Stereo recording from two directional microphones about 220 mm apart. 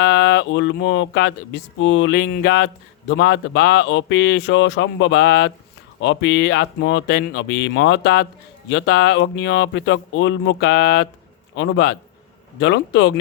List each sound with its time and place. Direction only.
0.0 s speech: 50° left (ahead or behind)